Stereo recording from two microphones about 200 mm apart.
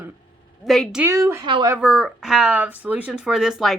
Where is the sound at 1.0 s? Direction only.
15° right (ahead or behind).